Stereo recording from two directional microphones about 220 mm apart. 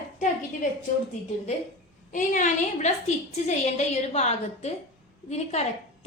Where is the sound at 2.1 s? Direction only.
35° left (ahead or behind).